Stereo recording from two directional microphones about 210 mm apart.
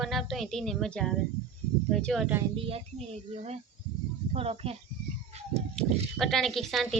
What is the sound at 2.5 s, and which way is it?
Speech, 25° right (ahead or behind).